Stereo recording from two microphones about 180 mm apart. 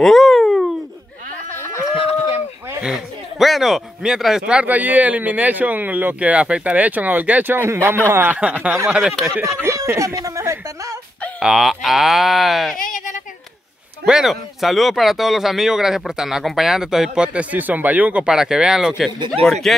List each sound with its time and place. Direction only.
0.0 s a sound: centre (ahead or behind)
1.6 s a sound: 15° left (ahead or behind)
2.8 s speech: centre (ahead or behind)
9.4 s speech: 15° right (ahead or behind)
11.3 s speech: centre (ahead or behind)
12.7 s a sound: 50° left (ahead or behind)
14.0 s speech: centre (ahead or behind)
19.1 s speech: 25° right (ahead or behind)
19.4 s speech: centre (ahead or behind)